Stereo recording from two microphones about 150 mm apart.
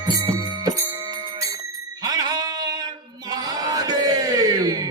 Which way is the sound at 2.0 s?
25° right (ahead or behind).